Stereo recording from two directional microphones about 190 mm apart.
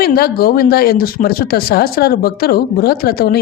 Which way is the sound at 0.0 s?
55° left (ahead or behind).